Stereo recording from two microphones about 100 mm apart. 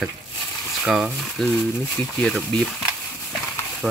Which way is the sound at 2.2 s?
10° left (ahead or behind).